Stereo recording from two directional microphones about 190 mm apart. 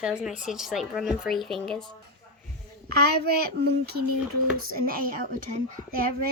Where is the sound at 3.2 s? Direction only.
55° right (ahead or behind).